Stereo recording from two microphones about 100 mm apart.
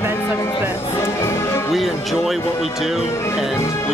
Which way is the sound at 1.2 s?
25° left (ahead or behind).